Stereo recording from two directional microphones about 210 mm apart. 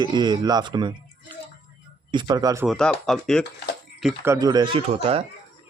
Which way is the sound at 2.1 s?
20° right (ahead or behind).